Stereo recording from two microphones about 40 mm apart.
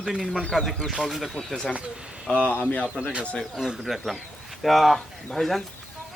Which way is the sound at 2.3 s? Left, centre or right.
Left.